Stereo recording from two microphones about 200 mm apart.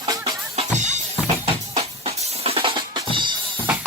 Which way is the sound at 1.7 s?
30° right (ahead or behind).